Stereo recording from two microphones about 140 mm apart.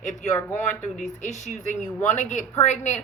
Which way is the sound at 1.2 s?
60° left (ahead or behind).